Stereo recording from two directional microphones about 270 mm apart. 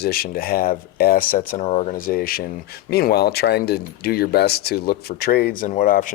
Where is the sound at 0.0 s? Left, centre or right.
Left.